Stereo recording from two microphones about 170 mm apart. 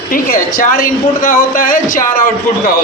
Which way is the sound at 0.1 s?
55° left (ahead or behind).